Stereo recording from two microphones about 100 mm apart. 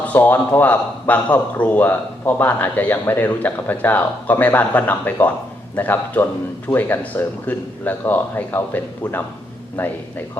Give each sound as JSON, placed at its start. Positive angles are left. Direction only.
{"t": 0.1, "sound": "a man's voice", "side_deg": 20}